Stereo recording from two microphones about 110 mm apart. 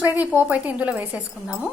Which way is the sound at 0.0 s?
15° right (ahead or behind).